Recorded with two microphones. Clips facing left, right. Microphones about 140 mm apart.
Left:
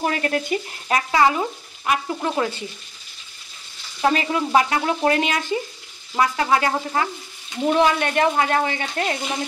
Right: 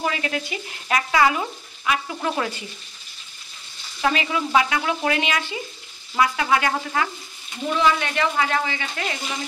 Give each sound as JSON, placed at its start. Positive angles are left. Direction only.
{"t": 0.0, "sound": "speech", "side_deg": 45}
{"t": 0.8, "sound": "speech", "side_deg": 35}
{"t": 2.1, "sound": "speech", "side_deg": 15}
{"t": 4.0, "sound": "speech", "side_deg": 40}
{"t": 7.6, "sound": "speech", "side_deg": 50}